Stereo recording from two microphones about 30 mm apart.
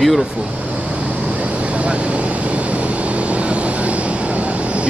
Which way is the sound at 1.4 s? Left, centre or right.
Right.